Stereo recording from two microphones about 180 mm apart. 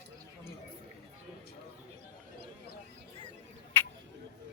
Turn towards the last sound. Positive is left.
turn(degrees=15)  # may be behind; listen again after turning